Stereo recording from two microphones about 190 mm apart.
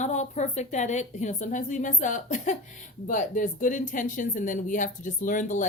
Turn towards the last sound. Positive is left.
turn(degrees=40)  # may be behind; listen again after turning